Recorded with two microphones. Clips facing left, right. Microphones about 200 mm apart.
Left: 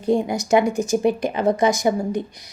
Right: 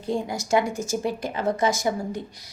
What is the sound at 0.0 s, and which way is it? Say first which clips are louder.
Speech: left 7 dB; 20° left (ahead or behind).